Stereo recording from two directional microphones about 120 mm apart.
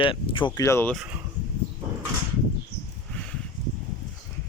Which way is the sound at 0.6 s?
20° left (ahead or behind).